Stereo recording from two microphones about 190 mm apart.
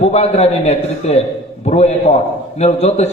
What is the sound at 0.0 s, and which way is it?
A man's voice, 35° left (ahead or behind).